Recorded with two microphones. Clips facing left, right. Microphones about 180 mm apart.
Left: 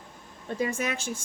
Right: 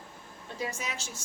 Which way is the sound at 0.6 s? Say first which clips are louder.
Left 7 dB; 55° left (ahead or behind).